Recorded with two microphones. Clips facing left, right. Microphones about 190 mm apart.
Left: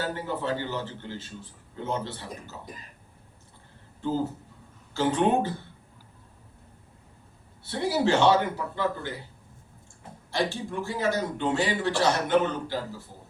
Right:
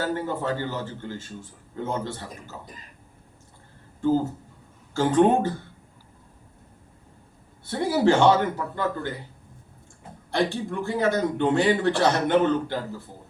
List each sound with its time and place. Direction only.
0.0 s a man's voice: 45° right (ahead or behind)
4.0 s a man's voice: 50° right (ahead or behind)
7.6 s a man's voice: 50° right (ahead or behind)
10.3 s a man's voice: 55° right (ahead or behind)